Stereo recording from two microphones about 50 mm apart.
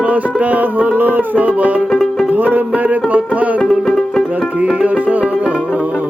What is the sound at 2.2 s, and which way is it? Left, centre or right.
Music, right.